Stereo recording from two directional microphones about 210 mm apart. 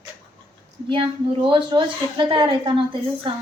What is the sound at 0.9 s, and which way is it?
A woman's voice, 25° right (ahead or behind).